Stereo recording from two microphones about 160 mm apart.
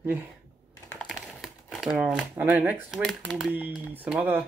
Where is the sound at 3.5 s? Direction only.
10° right (ahead or behind).